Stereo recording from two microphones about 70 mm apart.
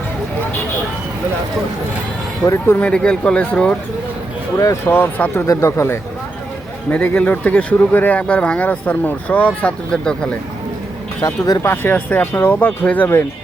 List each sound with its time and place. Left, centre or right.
2.4 s speech: centre
4.5 s speech: left
4.9 s speech: left
5.5 s speech: left
6.9 s speech: left
11.6 s speech: left